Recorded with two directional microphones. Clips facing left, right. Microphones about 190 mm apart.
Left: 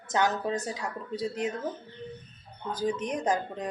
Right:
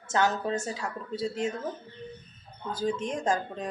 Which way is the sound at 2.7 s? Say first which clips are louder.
Even; 15° left (ahead or behind).